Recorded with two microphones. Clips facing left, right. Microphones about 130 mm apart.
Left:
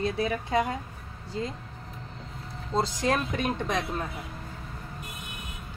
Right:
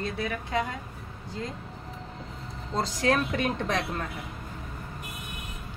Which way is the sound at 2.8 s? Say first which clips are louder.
Right 1 dB; centre (ahead or behind).